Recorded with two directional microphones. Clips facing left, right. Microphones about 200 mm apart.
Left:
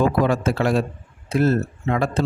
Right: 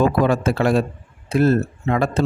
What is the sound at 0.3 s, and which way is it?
Speech, 55° right (ahead or behind).